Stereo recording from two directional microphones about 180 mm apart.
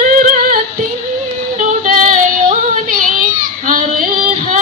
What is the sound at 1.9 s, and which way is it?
Female singing, 45° right (ahead or behind).